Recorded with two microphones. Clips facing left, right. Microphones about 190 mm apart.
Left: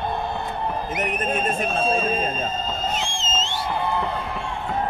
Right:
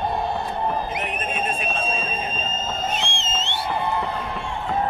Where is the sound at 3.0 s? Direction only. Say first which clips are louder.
Left 1 dB; 65° right (ahead or behind).